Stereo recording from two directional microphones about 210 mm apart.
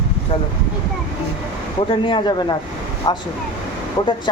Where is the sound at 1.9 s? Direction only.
25° left (ahead or behind).